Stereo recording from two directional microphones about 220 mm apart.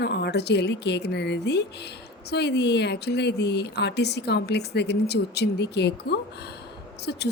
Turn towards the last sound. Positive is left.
turn(degrees=50)  # may be behind; listen again after turning